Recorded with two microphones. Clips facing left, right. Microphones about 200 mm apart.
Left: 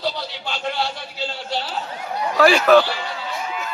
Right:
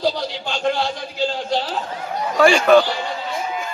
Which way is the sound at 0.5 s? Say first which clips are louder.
Right 4 dB; 50° right (ahead or behind).